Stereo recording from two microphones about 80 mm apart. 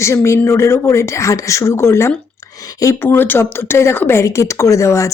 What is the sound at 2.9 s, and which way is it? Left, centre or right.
A woman's voice, left.